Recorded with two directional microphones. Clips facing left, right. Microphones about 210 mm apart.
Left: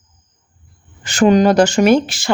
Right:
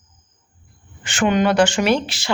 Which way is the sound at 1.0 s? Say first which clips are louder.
Left 6 dB; 40° left (ahead or behind).